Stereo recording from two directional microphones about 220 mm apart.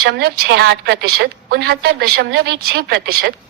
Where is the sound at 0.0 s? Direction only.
45° right (ahead or behind).